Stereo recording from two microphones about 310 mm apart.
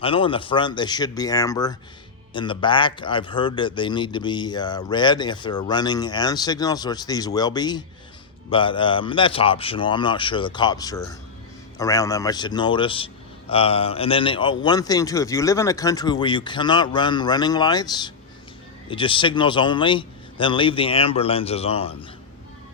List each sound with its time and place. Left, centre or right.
0.0 s a man's voice: centre
13.5 s a sound: centre
14.6 s a man's voice: centre